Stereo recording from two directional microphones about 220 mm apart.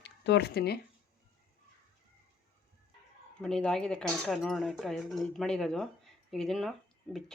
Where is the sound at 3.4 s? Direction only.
5° left (ahead or behind).